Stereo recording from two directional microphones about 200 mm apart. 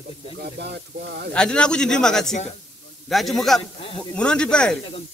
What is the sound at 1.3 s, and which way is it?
A man's voice, 5° left (ahead or behind).